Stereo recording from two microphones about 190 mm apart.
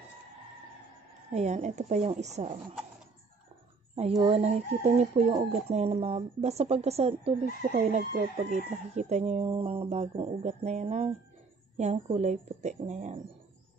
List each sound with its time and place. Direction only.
1.3 s speech: 35° right (ahead or behind)
3.9 s speech: 30° right (ahead or behind)